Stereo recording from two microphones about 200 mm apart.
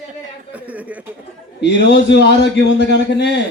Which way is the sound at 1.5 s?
60° left (ahead or behind).